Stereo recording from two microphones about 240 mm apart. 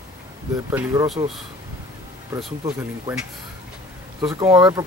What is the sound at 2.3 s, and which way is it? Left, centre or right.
Speech, centre.